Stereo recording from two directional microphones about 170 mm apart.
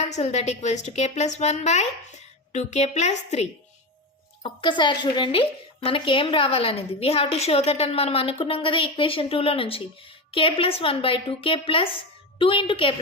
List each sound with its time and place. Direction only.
0.0 s a woman's voice: 40° left (ahead or behind)
4.4 s a woman's voice: 30° left (ahead or behind)